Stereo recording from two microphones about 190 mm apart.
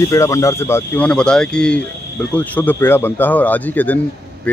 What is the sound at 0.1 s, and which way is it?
Speech, 15° left (ahead or behind).